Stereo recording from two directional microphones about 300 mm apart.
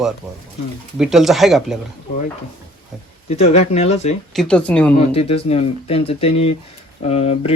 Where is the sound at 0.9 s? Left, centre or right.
Centre.